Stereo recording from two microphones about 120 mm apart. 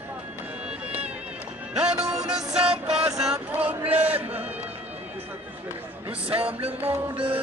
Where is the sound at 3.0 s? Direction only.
5° right (ahead or behind).